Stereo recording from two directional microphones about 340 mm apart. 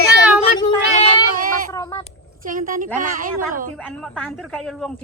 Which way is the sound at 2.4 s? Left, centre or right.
Right.